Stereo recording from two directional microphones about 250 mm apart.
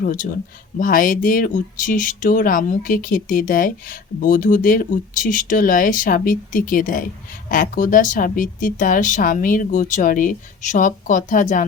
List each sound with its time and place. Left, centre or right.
0.0 s speech: left